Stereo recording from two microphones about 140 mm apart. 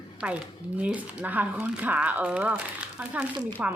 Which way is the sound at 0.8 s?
10° right (ahead or behind).